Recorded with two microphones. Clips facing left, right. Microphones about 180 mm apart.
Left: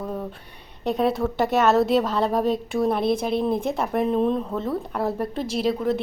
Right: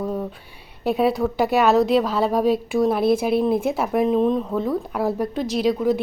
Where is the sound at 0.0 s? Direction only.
5° right (ahead or behind).